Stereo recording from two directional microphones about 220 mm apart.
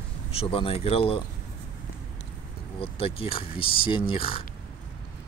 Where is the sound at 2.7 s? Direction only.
25° left (ahead or behind).